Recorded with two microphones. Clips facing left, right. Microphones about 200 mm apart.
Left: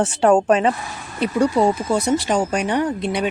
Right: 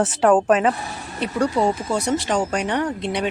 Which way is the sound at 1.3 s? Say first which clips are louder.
Left 3 dB; 25° left (ahead or behind).